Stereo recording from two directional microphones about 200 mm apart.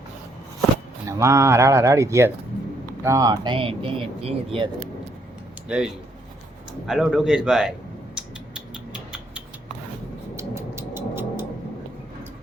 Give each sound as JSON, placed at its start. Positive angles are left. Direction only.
{"t": 1.0, "sound": "speech", "side_deg": -15}
{"t": 5.6, "sound": "a man's voice", "side_deg": -5}
{"t": 8.1, "sound": "a sound", "side_deg": -5}
{"t": 10.3, "sound": "music", "side_deg": -15}